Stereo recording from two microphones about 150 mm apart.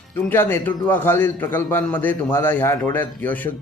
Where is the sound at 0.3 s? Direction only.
15° left (ahead or behind).